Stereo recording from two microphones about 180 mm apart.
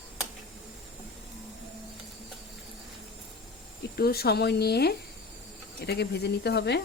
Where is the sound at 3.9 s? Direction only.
60° left (ahead or behind).